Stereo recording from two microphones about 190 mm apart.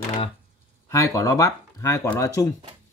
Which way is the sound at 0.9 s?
15° left (ahead or behind).